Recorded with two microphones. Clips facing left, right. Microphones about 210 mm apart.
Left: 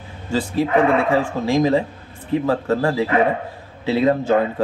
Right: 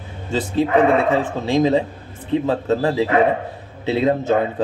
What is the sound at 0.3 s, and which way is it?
Speech, 20° right (ahead or behind).